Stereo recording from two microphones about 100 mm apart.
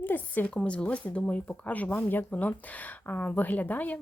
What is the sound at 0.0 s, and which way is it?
Speech, 15° left (ahead or behind).